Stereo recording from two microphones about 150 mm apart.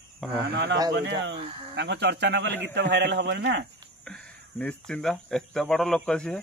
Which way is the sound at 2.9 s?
90° right.